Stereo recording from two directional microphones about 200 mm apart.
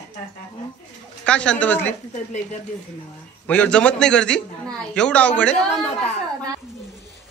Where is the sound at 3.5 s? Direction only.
5° left (ahead or behind).